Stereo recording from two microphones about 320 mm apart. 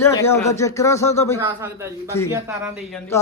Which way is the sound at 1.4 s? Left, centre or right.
Centre.